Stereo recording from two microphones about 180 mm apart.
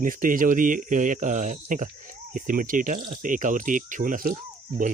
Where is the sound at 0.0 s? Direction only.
50° right (ahead or behind).